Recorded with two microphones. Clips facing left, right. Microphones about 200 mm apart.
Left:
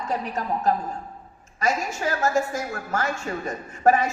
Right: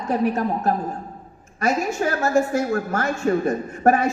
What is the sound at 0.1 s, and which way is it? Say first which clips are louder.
A woman's voice: right 7 dB; 50° right (ahead or behind).